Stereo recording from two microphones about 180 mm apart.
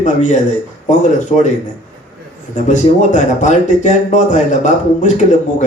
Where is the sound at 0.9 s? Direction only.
45° left (ahead or behind).